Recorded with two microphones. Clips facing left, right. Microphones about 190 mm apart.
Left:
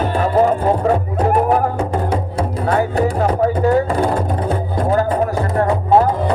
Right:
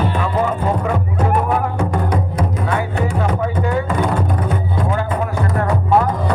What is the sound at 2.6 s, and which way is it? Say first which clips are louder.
Music: left 8 dB; 40° left (ahead or behind).